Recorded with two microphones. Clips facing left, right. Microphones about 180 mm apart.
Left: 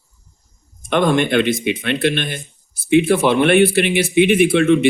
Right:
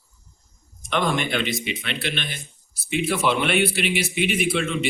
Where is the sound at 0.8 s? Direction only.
55° left (ahead or behind).